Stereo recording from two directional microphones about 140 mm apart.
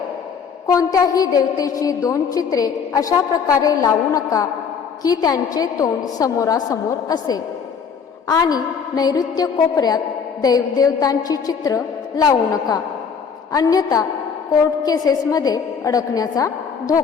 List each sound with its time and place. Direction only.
0.7 s a woman's voice: 25° left (ahead or behind)